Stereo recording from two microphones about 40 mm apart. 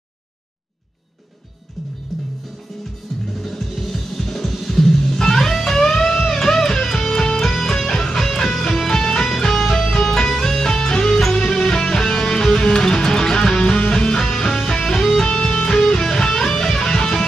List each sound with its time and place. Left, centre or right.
1.8 s music: centre
3.3 s music: centre
9.3 s music: centre